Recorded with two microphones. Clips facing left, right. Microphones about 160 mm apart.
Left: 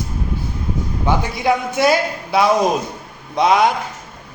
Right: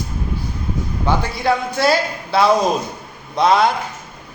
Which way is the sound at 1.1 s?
20° left (ahead or behind).